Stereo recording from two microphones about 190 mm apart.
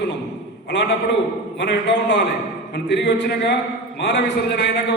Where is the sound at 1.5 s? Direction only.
65° left (ahead or behind).